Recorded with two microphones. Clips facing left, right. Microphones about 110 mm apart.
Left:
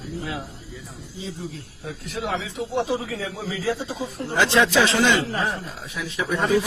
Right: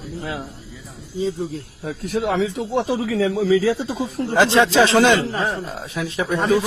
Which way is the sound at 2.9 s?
85° right.